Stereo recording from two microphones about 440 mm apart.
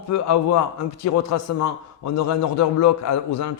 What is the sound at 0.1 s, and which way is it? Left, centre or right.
A man's voice, left.